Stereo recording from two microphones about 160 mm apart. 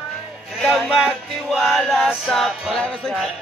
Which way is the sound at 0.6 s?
Centre (ahead or behind).